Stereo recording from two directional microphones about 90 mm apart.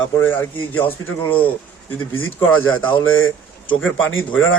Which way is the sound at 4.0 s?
20° left (ahead or behind).